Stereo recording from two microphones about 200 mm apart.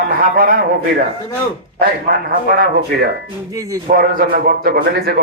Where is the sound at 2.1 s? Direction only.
50° right (ahead or behind).